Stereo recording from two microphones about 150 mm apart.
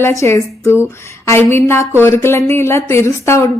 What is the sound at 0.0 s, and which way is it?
Speech, 20° left (ahead or behind).